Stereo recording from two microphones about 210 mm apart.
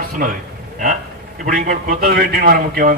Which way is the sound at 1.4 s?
40° right (ahead or behind).